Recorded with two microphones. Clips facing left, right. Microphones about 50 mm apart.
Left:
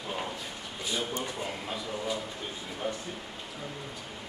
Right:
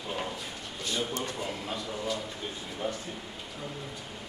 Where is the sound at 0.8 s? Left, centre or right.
Centre.